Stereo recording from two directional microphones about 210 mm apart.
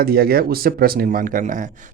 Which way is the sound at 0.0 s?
45° right (ahead or behind).